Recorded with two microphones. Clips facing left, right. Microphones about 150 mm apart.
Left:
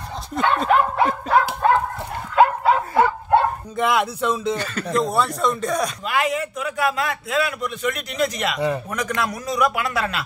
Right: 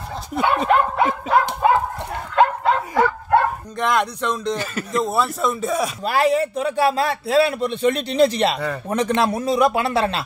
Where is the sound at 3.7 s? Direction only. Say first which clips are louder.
Even; 5° left (ahead or behind).